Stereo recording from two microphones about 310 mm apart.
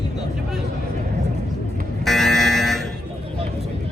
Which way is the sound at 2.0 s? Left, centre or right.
Centre.